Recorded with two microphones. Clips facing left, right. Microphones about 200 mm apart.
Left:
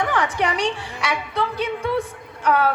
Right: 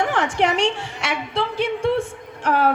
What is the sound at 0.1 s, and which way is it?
A woman's voice, 25° right (ahead or behind).